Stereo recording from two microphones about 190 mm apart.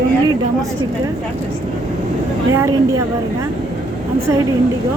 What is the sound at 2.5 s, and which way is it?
Speech, 15° right (ahead or behind).